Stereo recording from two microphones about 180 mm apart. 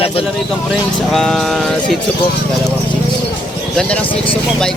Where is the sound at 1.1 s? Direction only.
5° left (ahead or behind).